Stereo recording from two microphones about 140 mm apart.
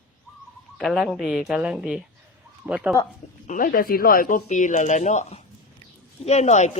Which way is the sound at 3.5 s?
85° left.